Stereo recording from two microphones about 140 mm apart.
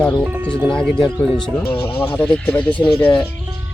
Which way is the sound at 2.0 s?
15° left (ahead or behind).